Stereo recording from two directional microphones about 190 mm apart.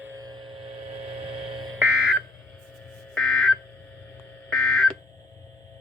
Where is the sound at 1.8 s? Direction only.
5° right (ahead or behind).